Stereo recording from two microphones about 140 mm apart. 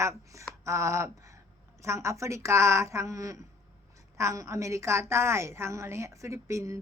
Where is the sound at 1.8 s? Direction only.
20° right (ahead or behind).